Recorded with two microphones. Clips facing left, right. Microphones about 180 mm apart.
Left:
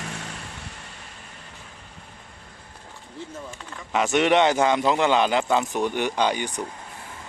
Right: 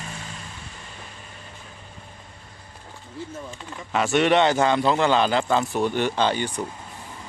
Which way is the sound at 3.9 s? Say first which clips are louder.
Even; 20° left (ahead or behind).